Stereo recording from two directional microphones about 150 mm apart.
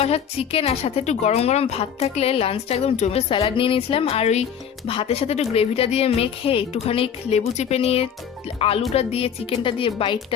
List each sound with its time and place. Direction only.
0.0 s a woman's voice: 40° left (ahead or behind)